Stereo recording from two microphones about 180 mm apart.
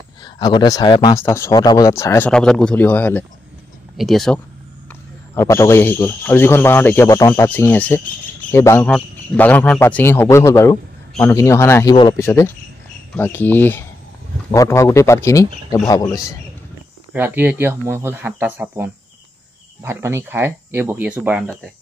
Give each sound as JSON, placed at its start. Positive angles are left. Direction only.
{"t": 0.2, "sound": "speech", "side_deg": 25}
{"t": 5.3, "sound": "a man's voice", "side_deg": 15}
{"t": 17.1, "sound": "speech", "side_deg": -10}